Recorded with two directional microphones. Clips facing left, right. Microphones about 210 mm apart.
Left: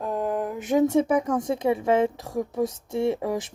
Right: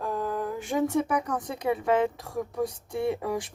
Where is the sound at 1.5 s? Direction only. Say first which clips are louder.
Left 4 dB; 25° left (ahead or behind).